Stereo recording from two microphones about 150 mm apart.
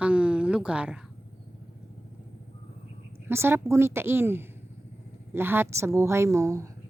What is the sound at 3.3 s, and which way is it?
Speech, 15° right (ahead or behind).